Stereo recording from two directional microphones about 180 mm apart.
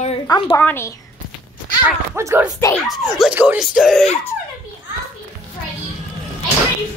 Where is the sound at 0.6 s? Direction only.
10° left (ahead or behind).